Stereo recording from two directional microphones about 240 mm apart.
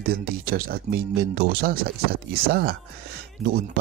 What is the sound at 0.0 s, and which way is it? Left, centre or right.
Speech, right.